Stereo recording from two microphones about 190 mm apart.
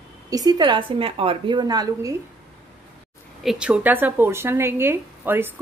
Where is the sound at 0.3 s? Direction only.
20° right (ahead or behind).